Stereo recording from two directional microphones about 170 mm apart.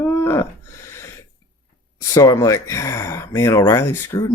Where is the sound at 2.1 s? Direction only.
20° left (ahead or behind).